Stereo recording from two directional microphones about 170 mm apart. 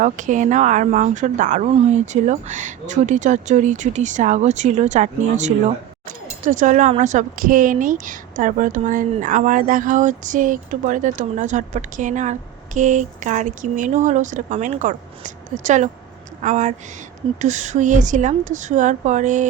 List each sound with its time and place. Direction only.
0.0 s speech: 45° right (ahead or behind)